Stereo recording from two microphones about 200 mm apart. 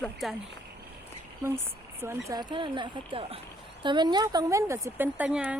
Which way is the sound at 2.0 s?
15° right (ahead or behind).